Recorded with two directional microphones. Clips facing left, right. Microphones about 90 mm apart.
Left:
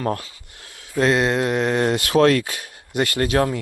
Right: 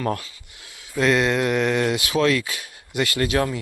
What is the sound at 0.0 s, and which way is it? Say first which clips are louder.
Speech: left 1 dB; 35° left (ahead or behind).